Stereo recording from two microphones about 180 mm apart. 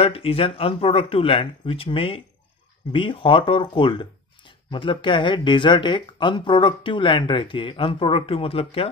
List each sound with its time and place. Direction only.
0.0 s speech: 30° left (ahead or behind)